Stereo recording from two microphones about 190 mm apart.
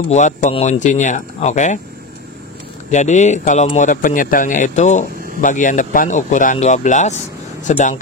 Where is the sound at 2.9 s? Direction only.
40° left (ahead or behind).